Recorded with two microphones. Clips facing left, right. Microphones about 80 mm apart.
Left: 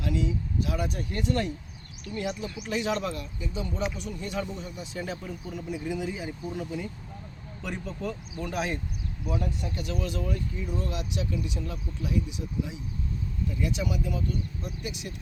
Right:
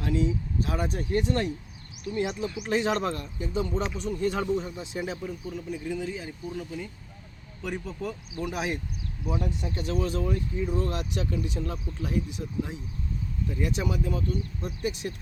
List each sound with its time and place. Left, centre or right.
0.0 s speech: right; by 2.2 s centre
2.6 s speech: right
4.6 s speech: right
5.0 s speech: centre
7.6 s speech: centre; by 12.2 s right
13.6 s speech: right